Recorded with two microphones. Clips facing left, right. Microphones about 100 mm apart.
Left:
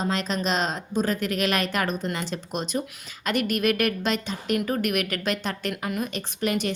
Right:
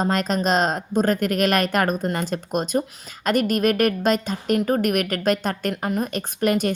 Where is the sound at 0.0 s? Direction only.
45° right (ahead or behind).